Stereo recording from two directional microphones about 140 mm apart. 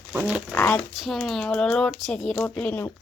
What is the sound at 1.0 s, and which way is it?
Speech, centre (ahead or behind).